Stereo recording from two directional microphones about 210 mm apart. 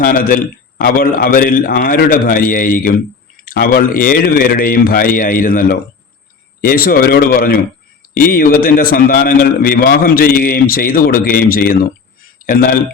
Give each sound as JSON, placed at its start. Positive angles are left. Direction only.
{"t": 0.0, "sound": "a man's voice", "side_deg": 40}